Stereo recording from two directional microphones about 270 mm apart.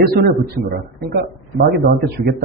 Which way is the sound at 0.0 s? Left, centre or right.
Right.